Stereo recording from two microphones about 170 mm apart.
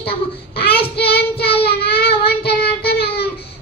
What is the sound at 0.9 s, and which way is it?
Child singing, 70° left (ahead or behind).